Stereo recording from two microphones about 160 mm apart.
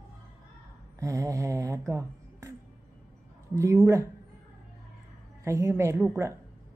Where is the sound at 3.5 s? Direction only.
20° right (ahead or behind).